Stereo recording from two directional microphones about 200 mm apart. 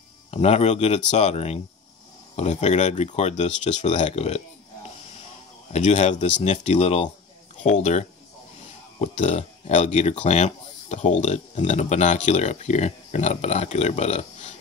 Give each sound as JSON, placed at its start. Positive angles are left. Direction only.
{"t": 0.3, "sound": "speech", "side_deg": 30}
{"t": 5.7, "sound": "speech", "side_deg": 35}
{"t": 9.0, "sound": "speech", "side_deg": 35}